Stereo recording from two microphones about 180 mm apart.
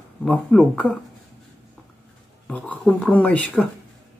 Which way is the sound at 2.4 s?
5° left (ahead or behind).